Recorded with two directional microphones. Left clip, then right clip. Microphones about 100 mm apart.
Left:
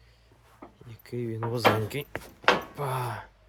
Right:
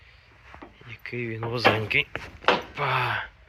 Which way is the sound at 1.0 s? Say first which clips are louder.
Right 3 dB; 75° left (ahead or behind).